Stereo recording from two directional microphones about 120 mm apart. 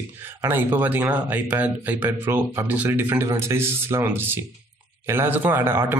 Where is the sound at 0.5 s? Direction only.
15° right (ahead or behind).